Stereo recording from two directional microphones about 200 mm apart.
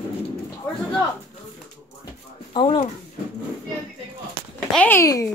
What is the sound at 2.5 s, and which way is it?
Speech, 25° left (ahead or behind).